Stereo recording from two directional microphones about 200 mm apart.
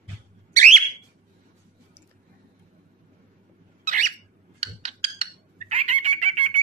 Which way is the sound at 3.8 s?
40° right (ahead or behind).